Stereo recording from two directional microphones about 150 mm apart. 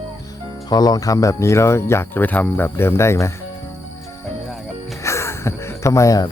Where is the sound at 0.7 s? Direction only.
25° left (ahead or behind).